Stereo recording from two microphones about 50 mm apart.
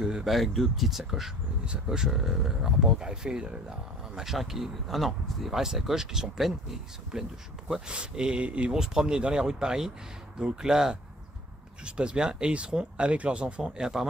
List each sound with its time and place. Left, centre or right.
0.0 s speech: centre
8.7 s speech: centre
13.6 s speech: centre